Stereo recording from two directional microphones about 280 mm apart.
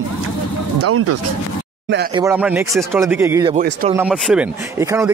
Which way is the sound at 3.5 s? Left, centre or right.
Right.